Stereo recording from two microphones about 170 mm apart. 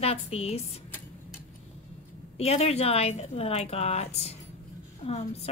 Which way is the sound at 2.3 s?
35° left (ahead or behind).